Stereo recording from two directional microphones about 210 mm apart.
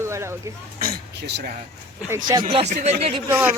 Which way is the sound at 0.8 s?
50° right (ahead or behind).